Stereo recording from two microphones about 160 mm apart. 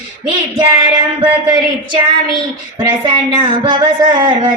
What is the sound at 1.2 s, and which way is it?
Speech, 30° right (ahead or behind).